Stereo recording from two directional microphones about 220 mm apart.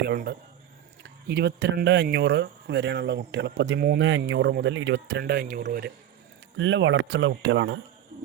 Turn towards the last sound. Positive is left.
turn(degrees=-55)  # may be behind; listen again after turning